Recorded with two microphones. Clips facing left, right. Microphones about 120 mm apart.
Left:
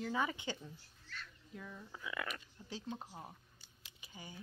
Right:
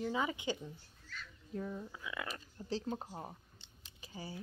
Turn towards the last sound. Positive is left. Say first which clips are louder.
# right 6 dB
turn(degrees=-35)  # may be behind; listen again after turning